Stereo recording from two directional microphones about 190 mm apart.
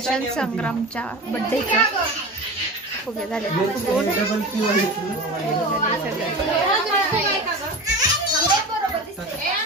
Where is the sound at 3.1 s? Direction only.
5° left (ahead or behind).